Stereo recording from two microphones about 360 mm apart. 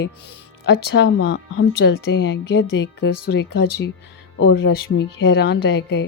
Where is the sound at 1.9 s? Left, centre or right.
Left.